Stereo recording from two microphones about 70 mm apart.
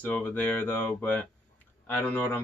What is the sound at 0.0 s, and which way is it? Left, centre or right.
Speech, left.